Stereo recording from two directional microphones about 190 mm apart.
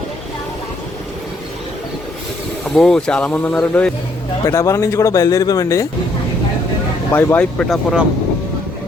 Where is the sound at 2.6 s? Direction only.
Centre (ahead or behind).